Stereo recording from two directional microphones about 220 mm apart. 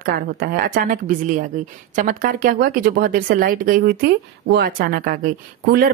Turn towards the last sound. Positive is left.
turn(degrees=-45)  # may be behind; listen again after turning